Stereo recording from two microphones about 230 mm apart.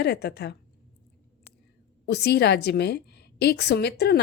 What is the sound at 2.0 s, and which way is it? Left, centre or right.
A woman's voice, left.